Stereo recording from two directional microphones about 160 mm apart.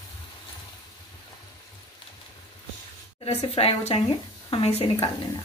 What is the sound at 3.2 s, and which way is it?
A woman's voice, 40° left (ahead or behind).